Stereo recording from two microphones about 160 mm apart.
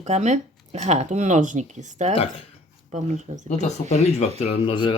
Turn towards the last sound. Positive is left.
turn(degrees=35)  # may be behind; listen again after turning